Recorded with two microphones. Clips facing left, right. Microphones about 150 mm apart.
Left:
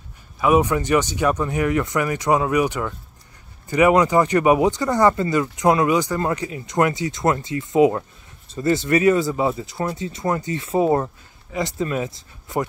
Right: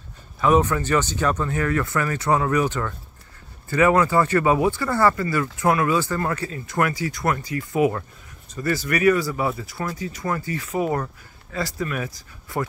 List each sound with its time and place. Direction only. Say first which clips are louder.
0.4 s speech: left 1 dB; 10° left (ahead or behind)